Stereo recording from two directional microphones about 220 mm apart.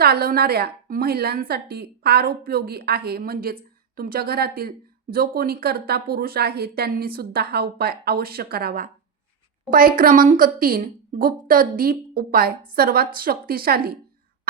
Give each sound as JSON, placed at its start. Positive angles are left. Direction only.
{"t": 0.0, "sound": "a woman's voice", "side_deg": -45}